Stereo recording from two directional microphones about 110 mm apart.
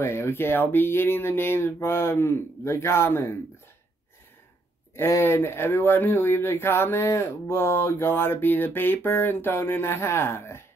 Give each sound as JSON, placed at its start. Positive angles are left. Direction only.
{"t": 0.0, "sound": "speech", "side_deg": 25}
{"t": 4.9, "sound": "speech", "side_deg": 25}